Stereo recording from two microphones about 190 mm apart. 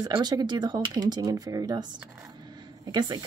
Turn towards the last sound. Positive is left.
turn(degrees=-20)  # may be behind; listen again after turning